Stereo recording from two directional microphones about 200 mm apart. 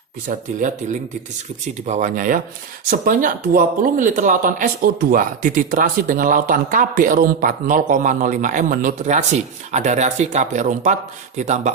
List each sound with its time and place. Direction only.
0.3 s speech: 40° right (ahead or behind)
1.6 s speech: 35° right (ahead or behind)